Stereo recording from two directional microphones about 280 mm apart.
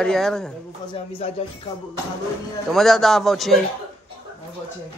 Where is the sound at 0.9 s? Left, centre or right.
Left.